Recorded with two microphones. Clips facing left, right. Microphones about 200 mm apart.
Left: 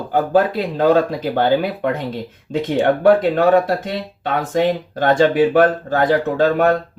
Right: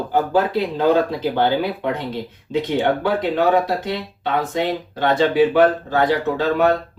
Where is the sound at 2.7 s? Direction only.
55° left (ahead or behind).